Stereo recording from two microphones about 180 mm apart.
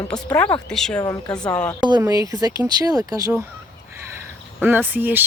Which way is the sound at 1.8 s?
20° right (ahead or behind).